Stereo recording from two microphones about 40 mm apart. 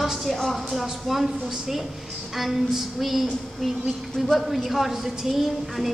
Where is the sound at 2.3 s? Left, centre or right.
Centre.